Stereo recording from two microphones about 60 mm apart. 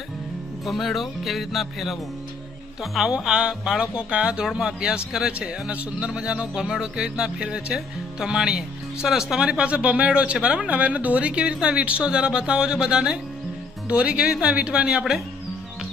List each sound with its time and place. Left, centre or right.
0.6 s speech: centre
3.2 s speech: centre